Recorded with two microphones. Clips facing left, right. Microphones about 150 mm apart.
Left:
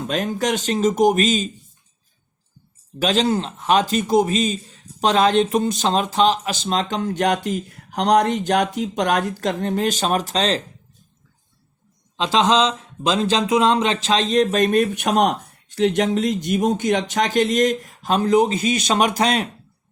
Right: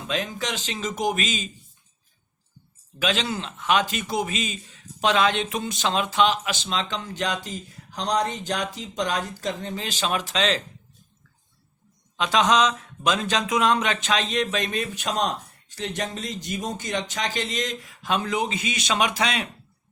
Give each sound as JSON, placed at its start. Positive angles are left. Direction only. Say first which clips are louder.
{"t": 0.0, "sound": "speech", "louder": "left 7 dB", "side_deg": 45}
{"t": 3.0, "sound": "speech", "louder": "left 7 dB", "side_deg": 40}
{"t": 12.1, "sound": "speech", "louder": "left 3 dB", "side_deg": 30}